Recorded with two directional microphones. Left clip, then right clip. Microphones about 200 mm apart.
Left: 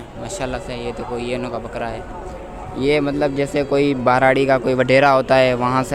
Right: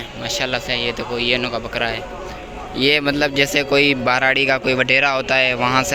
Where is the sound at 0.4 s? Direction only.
5° left (ahead or behind).